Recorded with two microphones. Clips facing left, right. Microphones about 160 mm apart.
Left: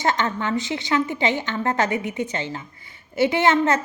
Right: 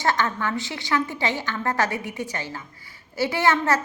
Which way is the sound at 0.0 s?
20° left (ahead or behind).